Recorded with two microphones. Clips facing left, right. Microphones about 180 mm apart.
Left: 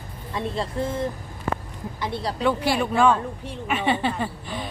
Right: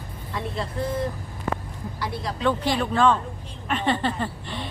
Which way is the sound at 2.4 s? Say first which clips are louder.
Left 1 dB; 10° left (ahead or behind).